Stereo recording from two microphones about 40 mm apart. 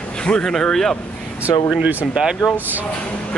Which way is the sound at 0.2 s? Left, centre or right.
Centre.